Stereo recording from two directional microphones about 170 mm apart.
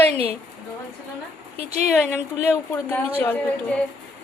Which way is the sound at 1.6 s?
40° right (ahead or behind).